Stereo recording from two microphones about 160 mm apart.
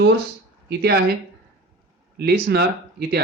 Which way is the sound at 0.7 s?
90° right.